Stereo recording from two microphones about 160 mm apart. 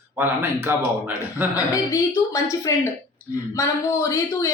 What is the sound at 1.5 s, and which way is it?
A woman's voice, 20° left (ahead or behind).